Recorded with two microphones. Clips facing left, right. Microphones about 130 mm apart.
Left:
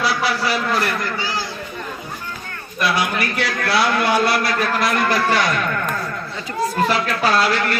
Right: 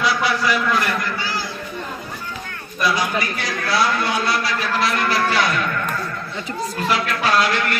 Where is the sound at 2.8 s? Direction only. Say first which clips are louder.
Even; 65° left (ahead or behind); by 5.4 s 45° left (ahead or behind).